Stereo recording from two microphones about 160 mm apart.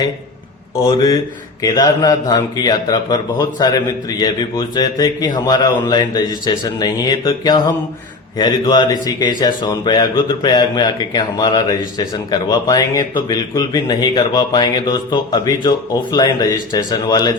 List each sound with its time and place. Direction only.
0.8 s speech: 25° left (ahead or behind)